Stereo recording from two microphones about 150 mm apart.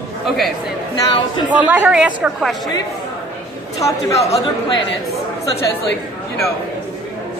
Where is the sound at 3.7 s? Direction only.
20° left (ahead or behind).